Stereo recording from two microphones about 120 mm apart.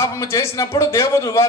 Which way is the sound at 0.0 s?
25° left (ahead or behind).